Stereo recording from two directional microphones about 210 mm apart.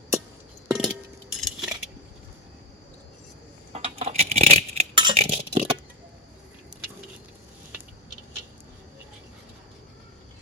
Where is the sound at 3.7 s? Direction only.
30° right (ahead or behind).